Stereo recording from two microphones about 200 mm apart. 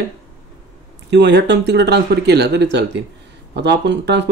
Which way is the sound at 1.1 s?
60° right (ahead or behind).